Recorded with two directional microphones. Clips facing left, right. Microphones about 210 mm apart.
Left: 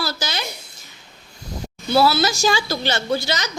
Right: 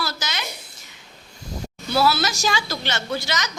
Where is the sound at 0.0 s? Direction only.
30° left (ahead or behind).